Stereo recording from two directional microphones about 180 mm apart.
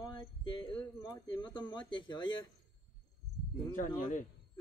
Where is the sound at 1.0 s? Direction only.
25° left (ahead or behind).